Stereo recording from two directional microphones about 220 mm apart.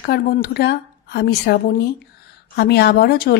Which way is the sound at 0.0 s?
45° left (ahead or behind).